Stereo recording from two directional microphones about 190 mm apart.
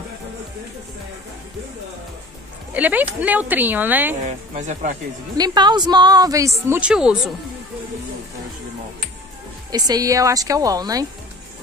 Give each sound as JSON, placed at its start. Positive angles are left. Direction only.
{"t": 2.7, "sound": "speech", "side_deg": -10}
{"t": 4.2, "sound": "speech", "side_deg": -40}
{"t": 5.4, "sound": "a woman's voice", "side_deg": -20}
{"t": 9.7, "sound": "a woman's voice", "side_deg": -20}